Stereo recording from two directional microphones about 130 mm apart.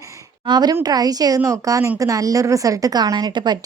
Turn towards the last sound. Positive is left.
turn(degrees=-35)  # may be behind; listen again after turning